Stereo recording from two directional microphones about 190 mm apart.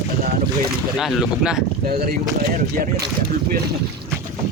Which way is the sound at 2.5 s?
50° right (ahead or behind).